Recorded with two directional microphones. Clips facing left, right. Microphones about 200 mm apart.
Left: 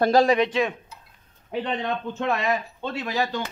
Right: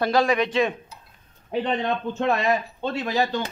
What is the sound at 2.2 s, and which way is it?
Speech, 35° right (ahead or behind).